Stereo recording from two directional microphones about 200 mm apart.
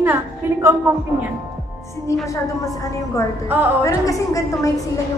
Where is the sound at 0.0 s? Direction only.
10° right (ahead or behind).